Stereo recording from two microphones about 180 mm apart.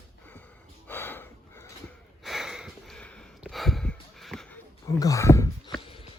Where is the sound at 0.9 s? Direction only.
10° left (ahead or behind).